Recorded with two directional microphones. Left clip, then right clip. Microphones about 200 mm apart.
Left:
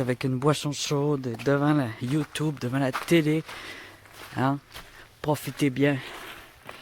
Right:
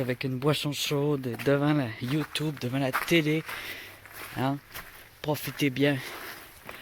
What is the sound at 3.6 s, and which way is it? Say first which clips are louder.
Walk: right 1 dB; 25° left (ahead or behind).